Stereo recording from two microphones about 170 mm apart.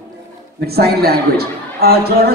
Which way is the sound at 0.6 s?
65° right (ahead or behind).